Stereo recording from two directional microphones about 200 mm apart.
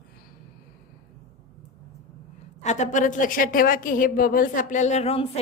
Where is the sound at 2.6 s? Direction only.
35° left (ahead or behind).